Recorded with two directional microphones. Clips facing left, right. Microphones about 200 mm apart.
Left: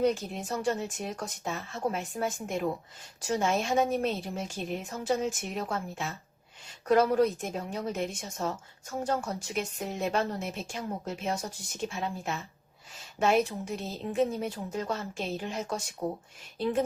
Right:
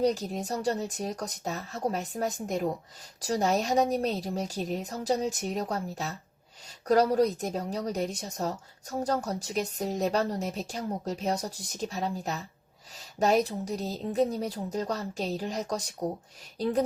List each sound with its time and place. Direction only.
0.0 s speech: 40° right (ahead or behind)